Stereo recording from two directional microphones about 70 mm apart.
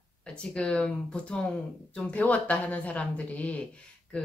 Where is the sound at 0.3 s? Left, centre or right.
Centre.